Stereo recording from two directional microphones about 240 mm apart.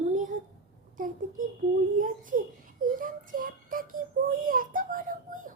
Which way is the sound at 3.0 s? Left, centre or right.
Right.